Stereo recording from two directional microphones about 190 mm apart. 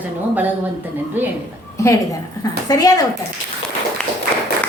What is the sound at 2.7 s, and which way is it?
Speech, 20° left (ahead or behind).